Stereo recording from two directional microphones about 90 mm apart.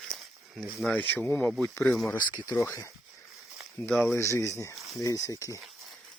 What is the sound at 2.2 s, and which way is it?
Speech, 55° left (ahead or behind).